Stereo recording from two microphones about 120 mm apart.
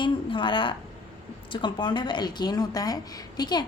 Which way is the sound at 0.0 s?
45° left (ahead or behind).